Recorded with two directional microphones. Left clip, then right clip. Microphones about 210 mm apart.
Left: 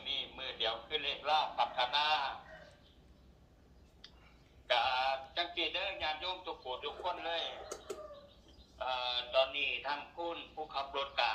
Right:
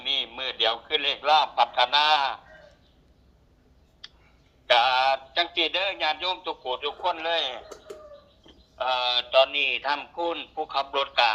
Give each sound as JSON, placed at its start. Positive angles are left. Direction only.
{"t": 0.0, "sound": "a man's voice", "side_deg": -55}
{"t": 4.0, "sound": "clicking", "side_deg": -55}
{"t": 4.6, "sound": "speech", "side_deg": -50}
{"t": 8.4, "sound": "a sound", "side_deg": -55}